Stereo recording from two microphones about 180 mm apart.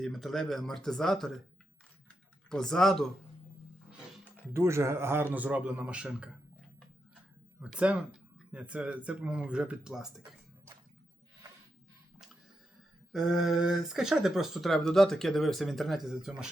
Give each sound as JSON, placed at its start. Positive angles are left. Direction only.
{"t": 0.0, "sound": "speech", "side_deg": 0}
{"t": 2.5, "sound": "speech", "side_deg": 5}
{"t": 4.5, "sound": "speech", "side_deg": -15}
{"t": 7.6, "sound": "speech", "side_deg": -5}
{"t": 13.1, "sound": "speech", "side_deg": 0}